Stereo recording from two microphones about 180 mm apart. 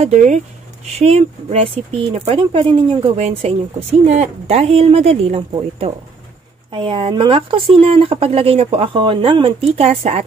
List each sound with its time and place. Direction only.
0.0 s speech: 40° right (ahead or behind)